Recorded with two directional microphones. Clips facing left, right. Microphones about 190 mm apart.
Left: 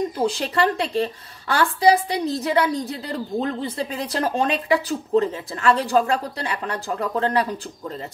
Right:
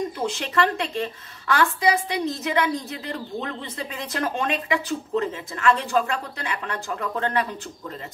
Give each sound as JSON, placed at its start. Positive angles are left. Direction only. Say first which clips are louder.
{"t": 0.2, "sound": "a woman's voice", "louder": "left 3 dB", "side_deg": 35}